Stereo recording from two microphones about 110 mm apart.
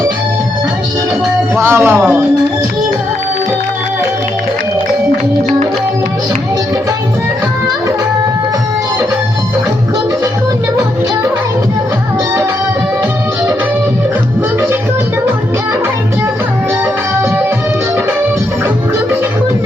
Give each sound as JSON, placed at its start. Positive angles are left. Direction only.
{"t": 1.5, "sound": "speech", "side_deg": -20}